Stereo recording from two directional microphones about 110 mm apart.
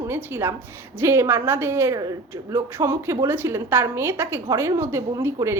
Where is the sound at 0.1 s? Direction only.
20° right (ahead or behind).